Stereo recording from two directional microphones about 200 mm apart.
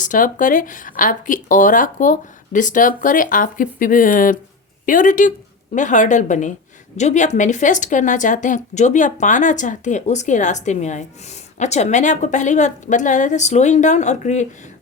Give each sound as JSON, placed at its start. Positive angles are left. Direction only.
{"t": 0.0, "sound": "a woman's voice", "side_deg": 40}